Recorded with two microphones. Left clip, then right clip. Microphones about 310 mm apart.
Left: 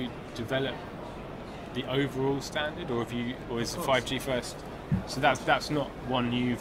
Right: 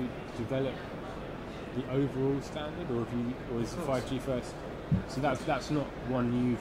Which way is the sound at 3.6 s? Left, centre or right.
Left.